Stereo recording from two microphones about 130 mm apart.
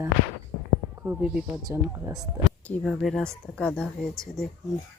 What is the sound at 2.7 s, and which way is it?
Speech, centre (ahead or behind).